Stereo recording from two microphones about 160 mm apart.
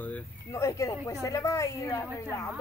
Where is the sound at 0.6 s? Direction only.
20° left (ahead or behind).